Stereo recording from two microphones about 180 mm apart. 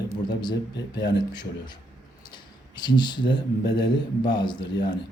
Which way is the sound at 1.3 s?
25° left (ahead or behind).